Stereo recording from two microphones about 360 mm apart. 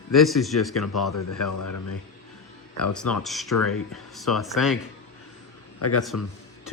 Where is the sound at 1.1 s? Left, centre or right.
Left.